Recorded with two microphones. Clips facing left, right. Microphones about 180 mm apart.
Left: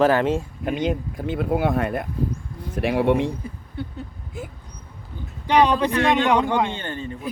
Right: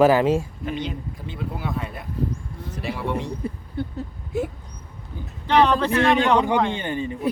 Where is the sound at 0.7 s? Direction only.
50° left (ahead or behind).